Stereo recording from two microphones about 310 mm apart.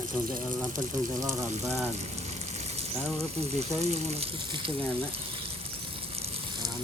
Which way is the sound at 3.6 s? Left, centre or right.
Right.